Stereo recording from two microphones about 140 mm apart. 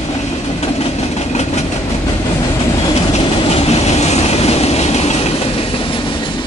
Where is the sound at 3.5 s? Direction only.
45° left (ahead or behind).